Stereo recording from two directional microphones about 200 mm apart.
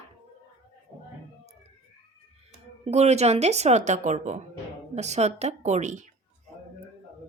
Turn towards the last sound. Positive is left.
turn(degrees=-35)  # may be behind; listen again after turning